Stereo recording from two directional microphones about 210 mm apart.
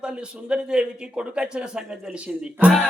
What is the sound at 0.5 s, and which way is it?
Speech, 5° right (ahead or behind).